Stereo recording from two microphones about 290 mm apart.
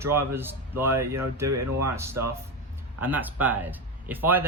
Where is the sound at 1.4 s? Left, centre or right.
Right.